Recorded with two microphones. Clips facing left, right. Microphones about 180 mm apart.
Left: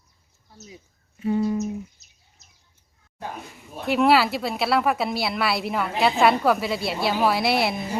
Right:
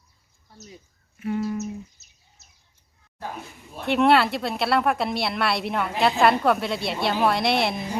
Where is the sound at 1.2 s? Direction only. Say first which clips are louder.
Left 4 dB; 25° left (ahead or behind).